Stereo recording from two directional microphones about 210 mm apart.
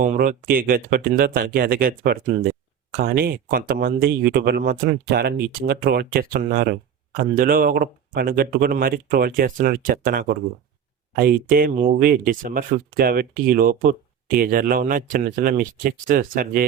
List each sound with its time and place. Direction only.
0.0 s speech: 40° right (ahead or behind)